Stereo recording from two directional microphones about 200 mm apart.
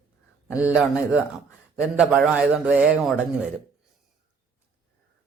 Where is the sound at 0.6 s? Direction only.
5° right (ahead or behind).